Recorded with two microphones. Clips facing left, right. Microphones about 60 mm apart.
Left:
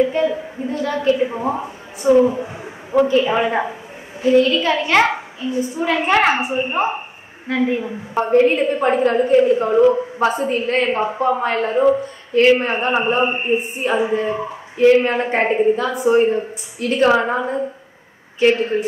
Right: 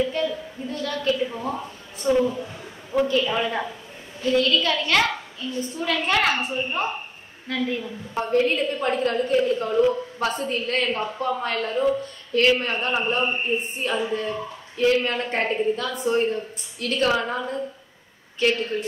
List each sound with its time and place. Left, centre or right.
0.0 s a woman's voice: left
2.4 s a sound: left
3.1 s a woman's voice: left
5.9 s a woman's voice: left